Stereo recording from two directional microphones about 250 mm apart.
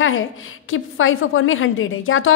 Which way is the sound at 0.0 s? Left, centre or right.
Left.